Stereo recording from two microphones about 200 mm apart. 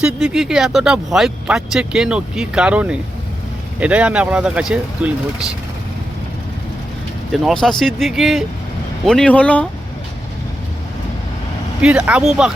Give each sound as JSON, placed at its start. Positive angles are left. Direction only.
{"t": 0.0, "sound": "speech", "side_deg": -5}
{"t": 7.4, "sound": "speech", "side_deg": 0}
{"t": 11.8, "sound": "speech", "side_deg": -5}